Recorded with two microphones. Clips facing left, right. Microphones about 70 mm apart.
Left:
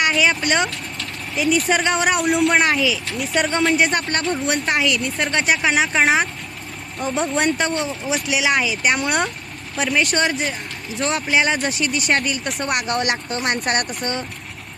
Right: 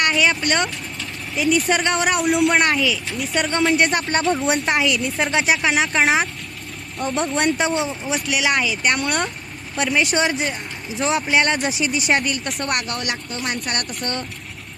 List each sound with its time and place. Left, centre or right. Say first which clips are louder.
0.0 s speech: even; centre
12.9 s speech: left 5 dB; left
14.0 s speech: left 1 dB; centre